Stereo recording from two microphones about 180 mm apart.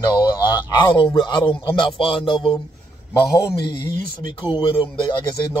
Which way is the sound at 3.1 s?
15° left (ahead or behind).